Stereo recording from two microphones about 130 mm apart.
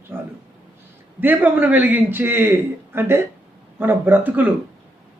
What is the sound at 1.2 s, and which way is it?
A man's voice, 15° right (ahead or behind).